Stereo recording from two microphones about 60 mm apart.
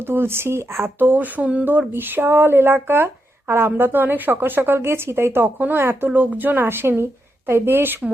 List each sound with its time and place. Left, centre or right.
0.1 s speech: right
0.9 s speech: right
1.9 s speech: right